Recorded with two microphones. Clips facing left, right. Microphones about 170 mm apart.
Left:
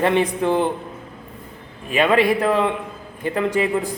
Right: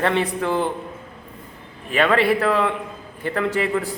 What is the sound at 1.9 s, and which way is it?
A man's voice, 15° left (ahead or behind).